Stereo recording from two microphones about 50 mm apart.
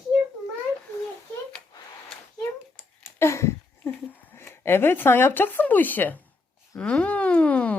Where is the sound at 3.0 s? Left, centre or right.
Left.